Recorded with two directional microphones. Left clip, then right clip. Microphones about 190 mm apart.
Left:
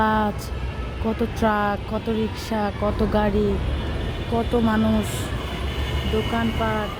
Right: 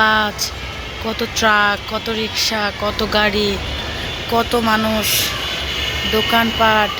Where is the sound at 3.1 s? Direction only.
15° left (ahead or behind).